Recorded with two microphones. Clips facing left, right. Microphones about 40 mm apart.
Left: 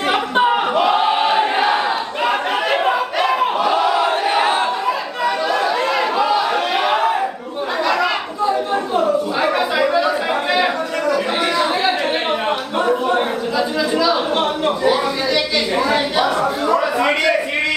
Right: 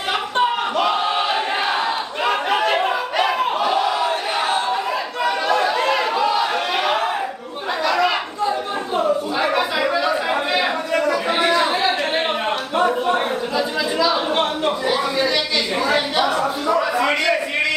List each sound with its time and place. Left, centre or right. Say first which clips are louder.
0.1 s a sound: left 3 dB; centre
2.2 s chatter: even; centre
3.3 s crowd: left 2 dB; centre
4.0 s battle cry: left 4 dB; left
5.2 s chatter: left 1 dB; centre
6.9 s battle cry: left 5 dB; centre
7.9 s a sound: left 1 dB; centre
11.4 s chatter: right 3 dB; centre
12.4 s a sound: left 1 dB; centre